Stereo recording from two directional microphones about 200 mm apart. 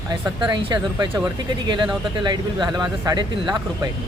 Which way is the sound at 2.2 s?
20° right (ahead or behind).